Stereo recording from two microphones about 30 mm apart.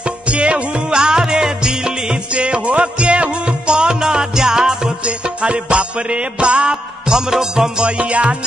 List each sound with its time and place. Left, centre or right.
0.3 s music: right
0.9 s music: right
2.3 s music: right
4.0 s music: right
5.0 s music: right
7.1 s music: centre
7.8 s music: right